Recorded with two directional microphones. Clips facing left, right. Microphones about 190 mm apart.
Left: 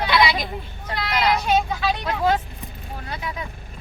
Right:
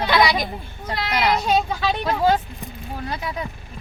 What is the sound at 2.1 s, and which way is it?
Speech, 35° right (ahead or behind).